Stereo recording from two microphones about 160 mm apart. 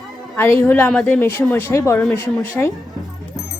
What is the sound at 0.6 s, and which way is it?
A woman's voice, 5° left (ahead or behind).